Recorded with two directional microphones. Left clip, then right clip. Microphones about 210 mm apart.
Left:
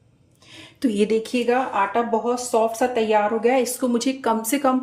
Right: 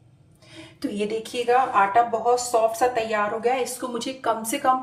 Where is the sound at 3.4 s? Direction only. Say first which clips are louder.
Left 4 dB; 55° left (ahead or behind).